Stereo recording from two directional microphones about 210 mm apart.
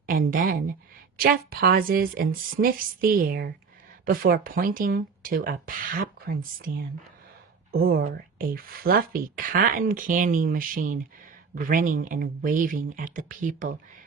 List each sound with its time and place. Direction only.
0.0 s speech: 45° right (ahead or behind)
7.7 s speech: 45° right (ahead or behind)